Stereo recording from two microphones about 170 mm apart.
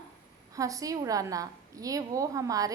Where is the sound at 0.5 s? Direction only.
20° right (ahead or behind).